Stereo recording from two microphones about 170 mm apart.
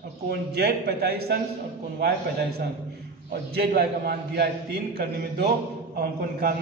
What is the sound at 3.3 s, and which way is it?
A man's voice, 65° right (ahead or behind).